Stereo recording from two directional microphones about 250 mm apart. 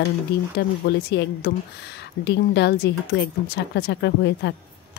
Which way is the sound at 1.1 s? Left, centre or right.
Left.